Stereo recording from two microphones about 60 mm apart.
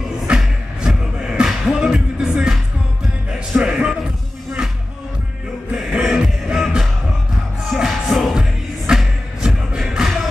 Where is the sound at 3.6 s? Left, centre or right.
Centre.